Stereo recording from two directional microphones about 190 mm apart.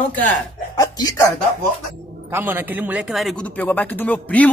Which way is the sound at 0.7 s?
20° left (ahead or behind).